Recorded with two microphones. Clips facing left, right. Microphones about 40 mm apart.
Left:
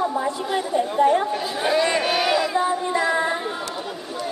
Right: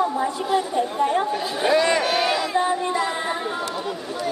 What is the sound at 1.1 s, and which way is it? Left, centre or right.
Speech, centre.